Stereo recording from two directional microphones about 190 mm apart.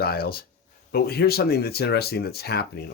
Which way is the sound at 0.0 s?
55° left (ahead or behind).